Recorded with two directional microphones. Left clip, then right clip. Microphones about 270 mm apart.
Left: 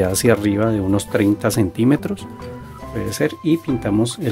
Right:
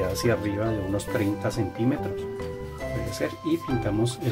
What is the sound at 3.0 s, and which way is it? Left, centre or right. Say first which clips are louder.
Speech: left 11 dB; left.